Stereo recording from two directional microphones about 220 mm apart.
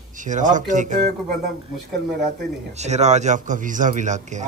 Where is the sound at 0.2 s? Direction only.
35° right (ahead or behind).